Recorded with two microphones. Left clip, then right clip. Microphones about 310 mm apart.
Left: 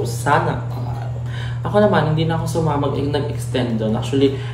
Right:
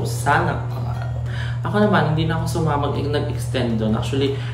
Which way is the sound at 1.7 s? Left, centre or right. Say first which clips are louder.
Left 3 dB; centre.